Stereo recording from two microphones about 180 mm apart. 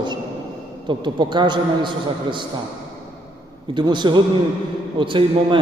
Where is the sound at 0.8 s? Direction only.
25° right (ahead or behind).